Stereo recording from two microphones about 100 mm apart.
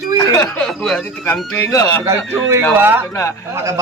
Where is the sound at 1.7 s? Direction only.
25° left (ahead or behind).